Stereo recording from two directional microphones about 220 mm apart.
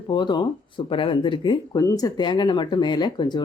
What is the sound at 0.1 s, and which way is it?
Speech, 20° left (ahead or behind).